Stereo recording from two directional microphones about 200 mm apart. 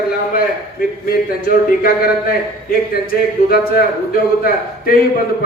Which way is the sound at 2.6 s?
50° left (ahead or behind).